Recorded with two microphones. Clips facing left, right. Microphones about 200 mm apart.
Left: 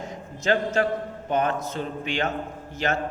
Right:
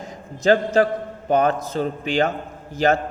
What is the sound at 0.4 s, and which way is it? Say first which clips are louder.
A man's voice: right 6 dB; 35° right (ahead or behind).